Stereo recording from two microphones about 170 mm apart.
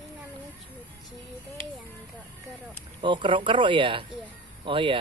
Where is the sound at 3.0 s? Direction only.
30° right (ahead or behind).